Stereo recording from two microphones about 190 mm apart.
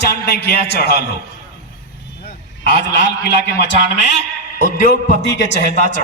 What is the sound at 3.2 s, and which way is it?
Speech, 60° left (ahead or behind).